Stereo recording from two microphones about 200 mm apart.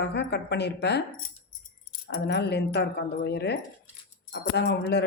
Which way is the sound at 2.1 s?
60° left (ahead or behind).